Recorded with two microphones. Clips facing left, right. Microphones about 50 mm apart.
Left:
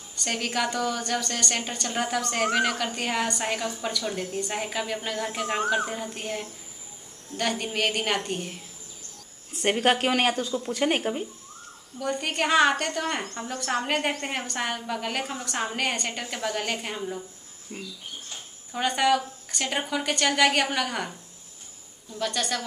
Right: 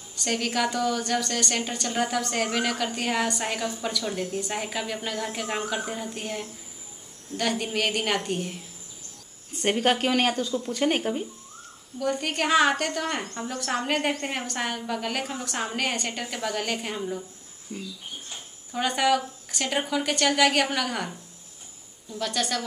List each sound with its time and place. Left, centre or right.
0.1 s a woman's voice: centre
9.5 s a woman's voice: centre
17.7 s speech: left
18.7 s a woman's voice: centre
22.2 s a woman's voice: centre